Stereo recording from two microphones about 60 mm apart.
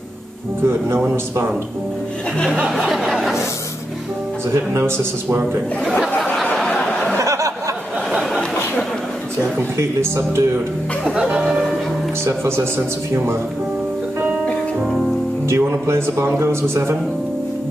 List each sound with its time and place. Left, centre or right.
0.7 s speech: right
2.9 s speech: centre
4.7 s speech: right
5.9 s a sound: centre
7.2 s a sound: right
8.1 s a sound: centre
9.8 s speech: right
11.1 s speech: centre
11.4 s music: centre
12.3 s speech: right
14.8 s speech: centre
15.4 s speech: right